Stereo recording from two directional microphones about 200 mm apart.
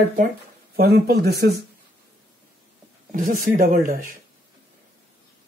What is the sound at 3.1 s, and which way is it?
Speech, 40° right (ahead or behind).